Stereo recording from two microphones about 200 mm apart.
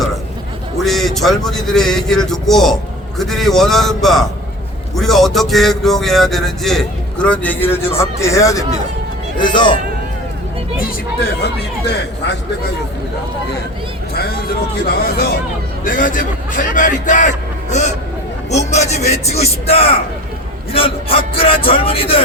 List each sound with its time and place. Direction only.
0.8 s speech: centre (ahead or behind); by 9.7 s 25° left (ahead or behind)
11.4 s speech: 55° left (ahead or behind)
15.8 s a man's voice: 45° left (ahead or behind); by 22.2 s 30° left (ahead or behind)